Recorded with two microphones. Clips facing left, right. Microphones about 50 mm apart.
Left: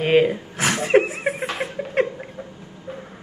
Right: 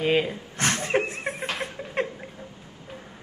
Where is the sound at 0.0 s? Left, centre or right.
Left.